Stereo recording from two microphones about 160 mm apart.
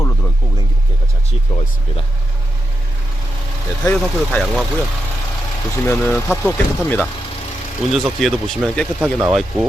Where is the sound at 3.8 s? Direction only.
10° left (ahead or behind).